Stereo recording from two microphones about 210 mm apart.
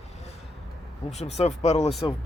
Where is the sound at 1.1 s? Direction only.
30° left (ahead or behind).